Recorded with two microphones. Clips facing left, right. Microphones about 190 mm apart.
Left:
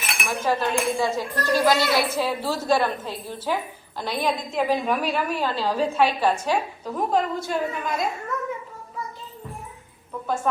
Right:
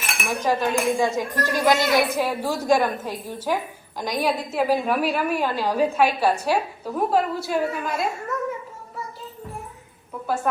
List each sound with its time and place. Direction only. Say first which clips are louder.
0.3 s speech: right 1 dB; 15° right (ahead or behind)
10.5 s speech: even; 10° right (ahead or behind)